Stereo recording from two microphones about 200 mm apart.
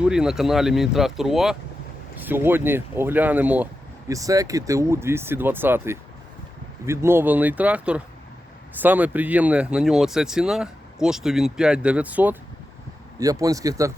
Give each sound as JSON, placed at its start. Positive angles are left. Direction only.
{"t": 0.0, "sound": "speech", "side_deg": -5}